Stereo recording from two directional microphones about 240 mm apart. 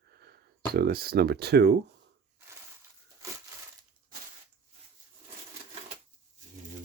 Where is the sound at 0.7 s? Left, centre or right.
Right.